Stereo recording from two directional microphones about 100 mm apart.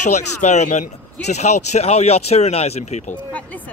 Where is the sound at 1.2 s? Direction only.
90° left.